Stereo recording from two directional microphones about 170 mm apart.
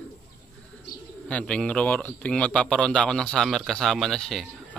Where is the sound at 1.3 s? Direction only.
5° left (ahead or behind).